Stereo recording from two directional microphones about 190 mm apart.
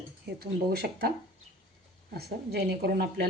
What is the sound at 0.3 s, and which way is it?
Speech, 55° right (ahead or behind).